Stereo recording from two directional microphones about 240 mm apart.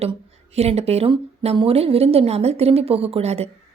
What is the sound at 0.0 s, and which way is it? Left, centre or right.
A woman's voice, right.